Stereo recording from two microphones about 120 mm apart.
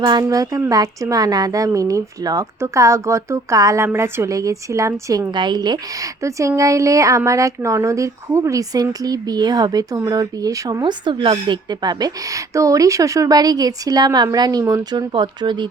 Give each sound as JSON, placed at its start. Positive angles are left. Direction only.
{"t": 0.0, "sound": "speech", "side_deg": -35}
{"t": 5.3, "sound": "speech", "side_deg": -40}